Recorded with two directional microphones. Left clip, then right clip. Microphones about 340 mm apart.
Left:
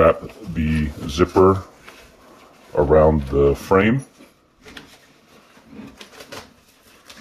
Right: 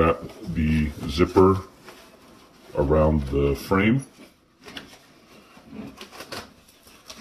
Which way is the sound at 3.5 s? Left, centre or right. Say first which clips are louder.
Left 6 dB; centre.